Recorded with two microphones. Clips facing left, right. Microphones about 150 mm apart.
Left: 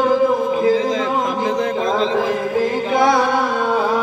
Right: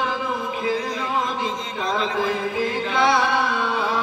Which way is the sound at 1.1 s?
50° left (ahead or behind).